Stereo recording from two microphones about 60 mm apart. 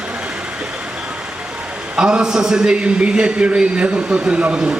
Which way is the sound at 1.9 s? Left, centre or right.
Centre.